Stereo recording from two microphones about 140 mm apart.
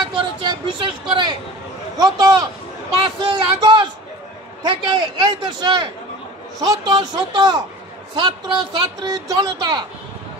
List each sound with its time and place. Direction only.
0.0 s vehicle: 35° right (ahead or behind)
2.0 s a man's voice: 25° right (ahead or behind)